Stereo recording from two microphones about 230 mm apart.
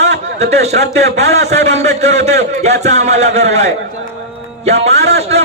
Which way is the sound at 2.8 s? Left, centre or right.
Right.